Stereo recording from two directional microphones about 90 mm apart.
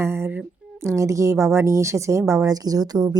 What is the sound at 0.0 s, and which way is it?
A woman's voice, 25° right (ahead or behind).